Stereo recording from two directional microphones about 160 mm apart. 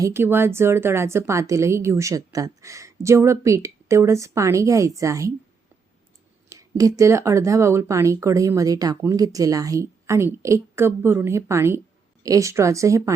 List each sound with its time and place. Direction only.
0.0 s a woman's voice: 15° right (ahead or behind)
6.5 s speech: 20° right (ahead or behind)